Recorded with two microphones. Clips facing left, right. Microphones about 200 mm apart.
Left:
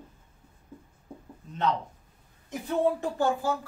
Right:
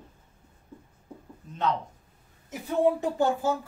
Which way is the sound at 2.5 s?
10° right (ahead or behind).